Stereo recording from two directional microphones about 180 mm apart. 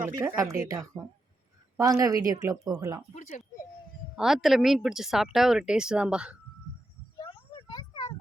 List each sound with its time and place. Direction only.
0.0 s speech: 15° right (ahead or behind)
3.2 s speech: 40° left (ahead or behind)
4.1 s speech: 5° right (ahead or behind)
7.2 s a sound: 25° left (ahead or behind)